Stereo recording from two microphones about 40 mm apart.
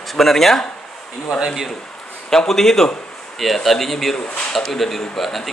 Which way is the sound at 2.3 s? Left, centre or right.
Centre.